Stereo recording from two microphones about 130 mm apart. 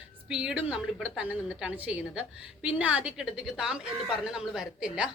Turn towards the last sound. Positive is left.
turn(degrees=-5)  # may be behind; listen again after turning